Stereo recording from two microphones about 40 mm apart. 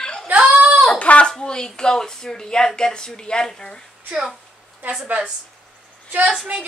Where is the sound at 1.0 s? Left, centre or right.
Left.